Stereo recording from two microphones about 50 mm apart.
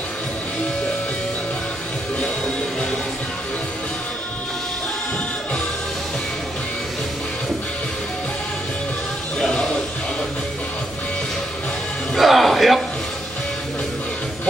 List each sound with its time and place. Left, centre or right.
2.1 s music: centre
9.4 s music: centre
12.2 s music: centre